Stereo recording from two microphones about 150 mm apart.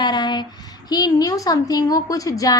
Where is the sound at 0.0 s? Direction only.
30° left (ahead or behind).